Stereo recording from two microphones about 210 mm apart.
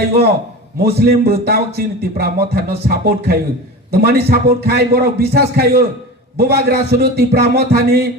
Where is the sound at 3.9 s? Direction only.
50° right (ahead or behind).